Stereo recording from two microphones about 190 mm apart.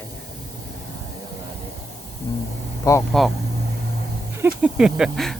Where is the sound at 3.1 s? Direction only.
Centre (ahead or behind).